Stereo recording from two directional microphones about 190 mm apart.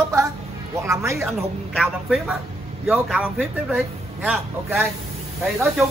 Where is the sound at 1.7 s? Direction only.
Centre (ahead or behind).